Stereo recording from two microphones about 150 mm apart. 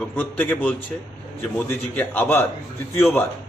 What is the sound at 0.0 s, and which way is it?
A man's voice, 10° left (ahead or behind).